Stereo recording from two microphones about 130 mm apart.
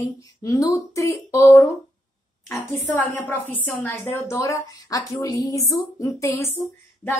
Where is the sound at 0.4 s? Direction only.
25° left (ahead or behind).